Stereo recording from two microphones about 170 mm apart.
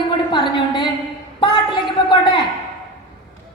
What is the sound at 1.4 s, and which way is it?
A woman's voice, 30° left (ahead or behind).